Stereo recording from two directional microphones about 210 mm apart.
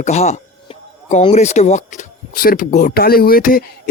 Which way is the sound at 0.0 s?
30° left (ahead or behind).